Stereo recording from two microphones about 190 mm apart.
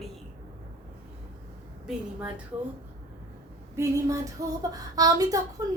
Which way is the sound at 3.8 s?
15° right (ahead or behind).